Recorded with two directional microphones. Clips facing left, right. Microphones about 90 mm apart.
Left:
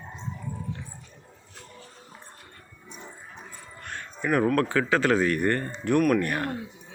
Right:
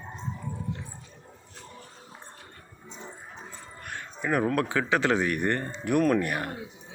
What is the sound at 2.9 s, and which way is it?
Speech, 20° right (ahead or behind).